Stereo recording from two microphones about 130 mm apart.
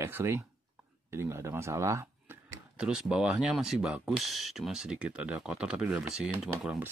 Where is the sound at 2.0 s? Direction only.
10° right (ahead or behind).